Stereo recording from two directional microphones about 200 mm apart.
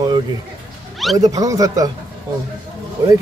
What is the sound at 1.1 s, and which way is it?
Speech, 20° right (ahead or behind).